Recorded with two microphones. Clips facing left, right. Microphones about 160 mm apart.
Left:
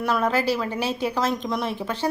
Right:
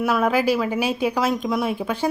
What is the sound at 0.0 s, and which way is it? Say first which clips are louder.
Speech: right 3 dB; 10° right (ahead or behind).